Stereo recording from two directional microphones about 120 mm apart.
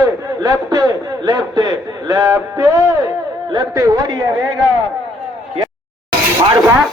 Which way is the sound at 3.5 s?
30° right (ahead or behind).